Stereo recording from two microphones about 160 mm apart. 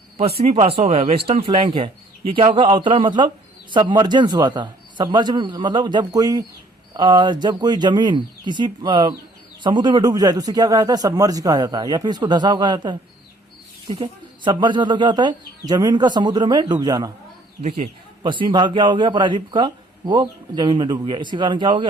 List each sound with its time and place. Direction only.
0.2 s speech: 40° right (ahead or behind)
17.6 s speech: 45° right (ahead or behind)
18.2 s speech: 30° right (ahead or behind)